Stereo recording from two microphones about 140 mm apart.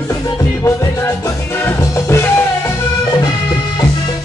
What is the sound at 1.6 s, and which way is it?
Music, 20° left (ahead or behind).